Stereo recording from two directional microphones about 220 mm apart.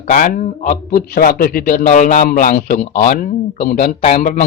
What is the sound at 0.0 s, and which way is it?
A man's voice, 35° left (ahead or behind).